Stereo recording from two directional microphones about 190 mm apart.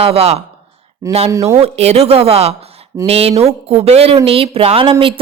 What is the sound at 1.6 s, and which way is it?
A woman's voice, 35° right (ahead or behind).